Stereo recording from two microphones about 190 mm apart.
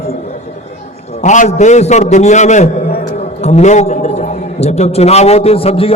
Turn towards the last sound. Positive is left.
turn(degrees=30)  # may be behind; listen again after turning